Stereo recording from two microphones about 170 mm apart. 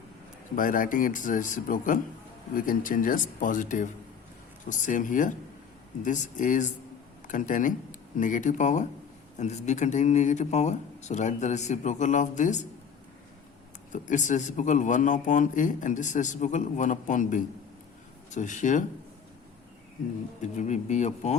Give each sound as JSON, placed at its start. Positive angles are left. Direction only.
{"t": 0.5, "sound": "a man's voice", "side_deg": 50}
{"t": 13.9, "sound": "a man's voice", "side_deg": 45}
{"t": 20.4, "sound": "a man's voice", "side_deg": 45}